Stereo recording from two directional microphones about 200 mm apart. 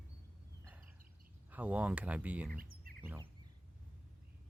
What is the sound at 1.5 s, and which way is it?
Speech, 10° right (ahead or behind).